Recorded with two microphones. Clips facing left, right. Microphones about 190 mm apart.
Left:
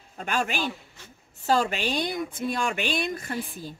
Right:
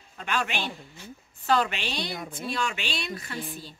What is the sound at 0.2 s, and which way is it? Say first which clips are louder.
Speech: left 2 dB; 45° left (ahead or behind).